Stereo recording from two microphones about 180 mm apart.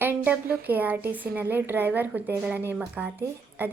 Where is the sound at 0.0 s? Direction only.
10° right (ahead or behind).